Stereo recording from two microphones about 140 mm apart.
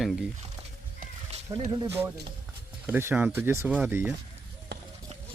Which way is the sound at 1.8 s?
15° right (ahead or behind).